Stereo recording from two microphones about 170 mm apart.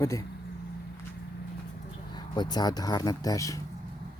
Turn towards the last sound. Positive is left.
turn(degrees=20)  # may be behind; listen again after turning